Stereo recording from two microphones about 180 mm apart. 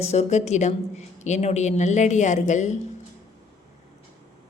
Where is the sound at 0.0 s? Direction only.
35° left (ahead or behind).